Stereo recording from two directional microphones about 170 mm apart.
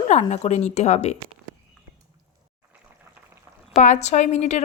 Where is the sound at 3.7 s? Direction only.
45° left (ahead or behind).